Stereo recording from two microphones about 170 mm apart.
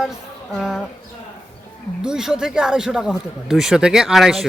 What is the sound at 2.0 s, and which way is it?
Speech, 5° right (ahead or behind).